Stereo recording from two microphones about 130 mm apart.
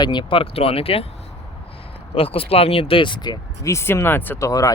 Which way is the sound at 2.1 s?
45° left (ahead or behind).